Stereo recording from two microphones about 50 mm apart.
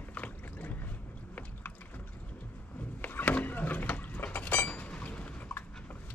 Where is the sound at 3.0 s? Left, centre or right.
Left.